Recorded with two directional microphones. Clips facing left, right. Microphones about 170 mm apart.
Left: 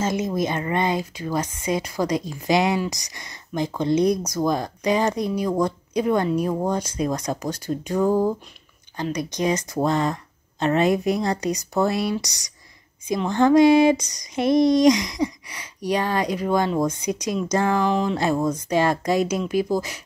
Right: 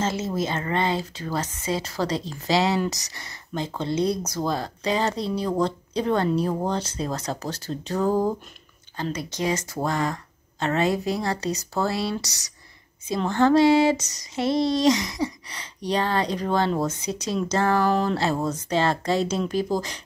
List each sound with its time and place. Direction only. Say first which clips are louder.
0.0 s speech: left 3 dB; 15° left (ahead or behind)